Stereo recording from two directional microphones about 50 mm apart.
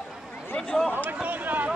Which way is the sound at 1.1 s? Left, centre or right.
Right.